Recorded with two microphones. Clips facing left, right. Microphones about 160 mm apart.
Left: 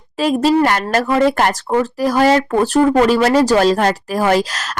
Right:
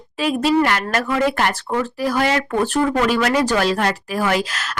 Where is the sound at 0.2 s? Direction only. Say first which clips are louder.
Left 4 dB; 40° left (ahead or behind).